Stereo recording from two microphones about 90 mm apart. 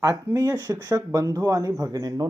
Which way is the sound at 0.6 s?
45° right (ahead or behind).